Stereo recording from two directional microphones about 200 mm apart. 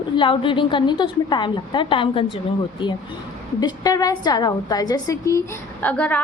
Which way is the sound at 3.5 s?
20° left (ahead or behind).